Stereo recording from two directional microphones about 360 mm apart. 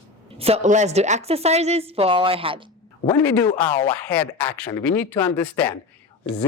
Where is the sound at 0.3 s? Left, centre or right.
Centre.